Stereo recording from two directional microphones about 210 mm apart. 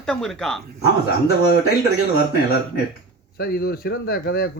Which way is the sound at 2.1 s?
50° left (ahead or behind).